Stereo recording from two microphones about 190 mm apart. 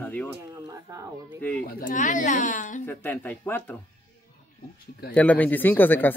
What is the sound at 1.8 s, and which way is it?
A woman's voice, 45° left (ahead or behind).